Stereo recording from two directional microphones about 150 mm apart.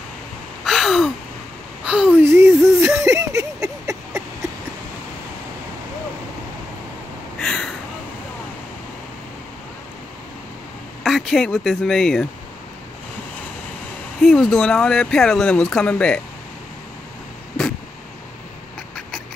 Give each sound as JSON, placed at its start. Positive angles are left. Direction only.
{"t": 0.7, "sound": "gasp", "side_deg": 0}
{"t": 1.9, "sound": "whimper", "side_deg": -10}
{"t": 2.8, "sound": "a sound", "side_deg": -20}
{"t": 7.3, "sound": "a sound", "side_deg": 5}
{"t": 11.1, "sound": "speech", "side_deg": 0}
{"t": 14.2, "sound": "speech", "side_deg": 5}